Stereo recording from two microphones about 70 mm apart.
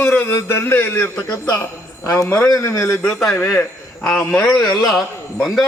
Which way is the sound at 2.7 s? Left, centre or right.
Left.